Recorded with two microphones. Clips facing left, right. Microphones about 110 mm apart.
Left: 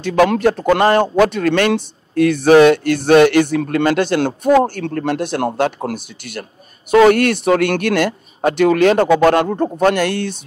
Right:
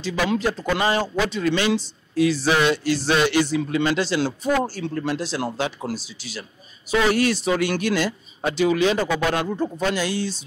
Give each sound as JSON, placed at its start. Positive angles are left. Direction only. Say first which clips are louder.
{"t": 0.0, "sound": "speech", "louder": "left 9 dB", "side_deg": 55}